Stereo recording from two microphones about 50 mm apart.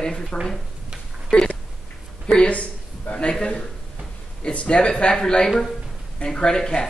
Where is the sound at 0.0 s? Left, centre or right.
Centre.